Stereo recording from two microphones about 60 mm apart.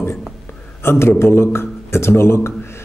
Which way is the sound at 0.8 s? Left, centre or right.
Left.